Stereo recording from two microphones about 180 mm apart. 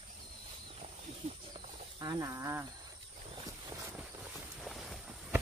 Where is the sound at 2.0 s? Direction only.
20° right (ahead or behind).